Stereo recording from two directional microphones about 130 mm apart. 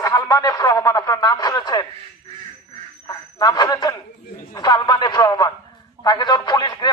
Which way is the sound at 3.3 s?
30° left (ahead or behind).